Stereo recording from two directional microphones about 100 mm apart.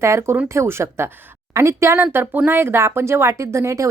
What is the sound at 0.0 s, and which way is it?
Speech, 25° right (ahead or behind).